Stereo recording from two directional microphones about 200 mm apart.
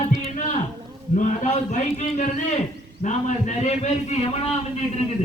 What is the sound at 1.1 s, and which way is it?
A man's voice, 40° left (ahead or behind).